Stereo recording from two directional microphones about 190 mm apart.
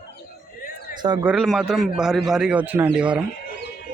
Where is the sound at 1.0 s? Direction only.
20° right (ahead or behind).